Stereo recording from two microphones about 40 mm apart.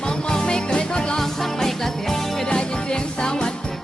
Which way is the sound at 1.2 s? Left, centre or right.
Centre.